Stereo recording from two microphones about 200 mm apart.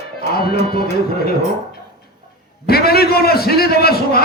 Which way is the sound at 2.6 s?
50° left (ahead or behind).